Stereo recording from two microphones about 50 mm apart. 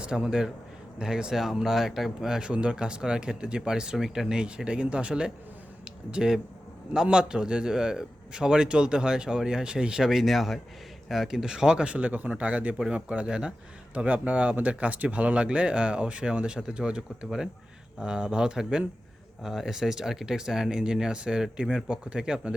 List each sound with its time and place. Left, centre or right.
0.0 s a man's voice: centre
2.5 s a man's voice: right